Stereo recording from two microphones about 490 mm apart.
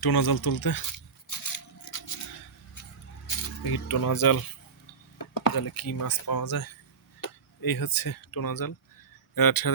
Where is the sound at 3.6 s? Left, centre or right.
Left.